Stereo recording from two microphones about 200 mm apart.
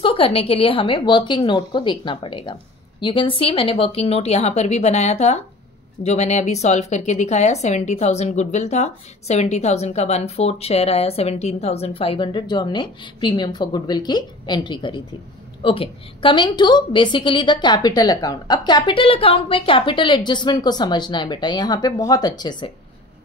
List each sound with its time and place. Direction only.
0.0 s a woman's voice: 25° left (ahead or behind)